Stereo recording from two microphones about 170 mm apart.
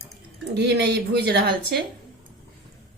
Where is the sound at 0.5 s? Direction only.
75° right (ahead or behind).